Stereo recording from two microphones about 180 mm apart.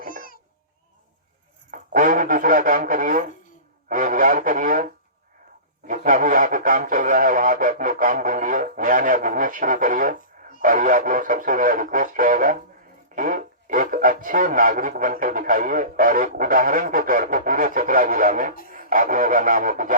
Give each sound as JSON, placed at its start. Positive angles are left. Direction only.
{"t": 0.1, "sound": "a sound", "side_deg": 50}
{"t": 1.7, "sound": "speech", "side_deg": -50}
{"t": 5.9, "sound": "speech", "side_deg": -50}